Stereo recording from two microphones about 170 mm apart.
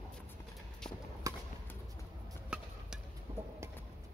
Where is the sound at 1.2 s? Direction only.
20° right (ahead or behind).